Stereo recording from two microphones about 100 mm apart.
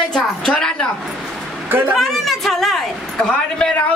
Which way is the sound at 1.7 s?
20° right (ahead or behind).